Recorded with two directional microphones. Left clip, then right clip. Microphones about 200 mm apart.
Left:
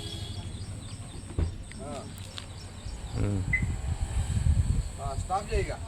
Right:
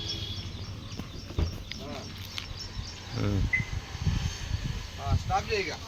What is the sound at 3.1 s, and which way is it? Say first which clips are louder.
Cricket: right 2 dB; centre (ahead or behind).